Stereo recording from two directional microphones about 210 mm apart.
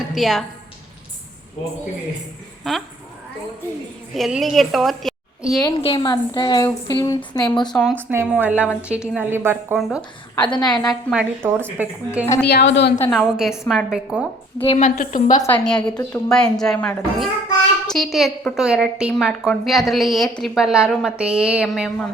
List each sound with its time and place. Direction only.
0.1 s a woman's voice: centre (ahead or behind)
2.7 s a woman's voice: centre (ahead or behind)
4.1 s a woman's voice: centre (ahead or behind)
5.5 s a woman's voice: 20° left (ahead or behind)
7.7 s a woman's voice: 5° left (ahead or behind)
8.1 s a woman's voice: 10° right (ahead or behind)
10.4 s a woman's voice: 20° left (ahead or behind)
10.8 s a woman's voice: 5° right (ahead or behind)
12.2 s speech: 10° left (ahead or behind)
12.5 s a woman's voice: 55° left (ahead or behind)
13.1 s a woman's voice: centre (ahead or behind)
14.6 s a woman's voice: 30° left (ahead or behind)
15.4 s a woman's voice: 5° left (ahead or behind)